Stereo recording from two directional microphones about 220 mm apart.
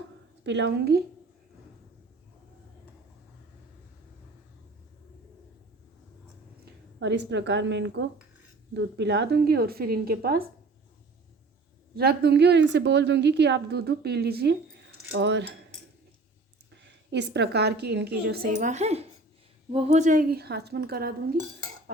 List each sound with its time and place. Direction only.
0.4 s a woman's voice: 50° right (ahead or behind)
7.0 s a woman's voice: 55° right (ahead or behind)
11.9 s a woman's voice: 45° right (ahead or behind)
17.1 s a woman's voice: 50° right (ahead or behind)
18.5 s a woman's voice: 30° right (ahead or behind)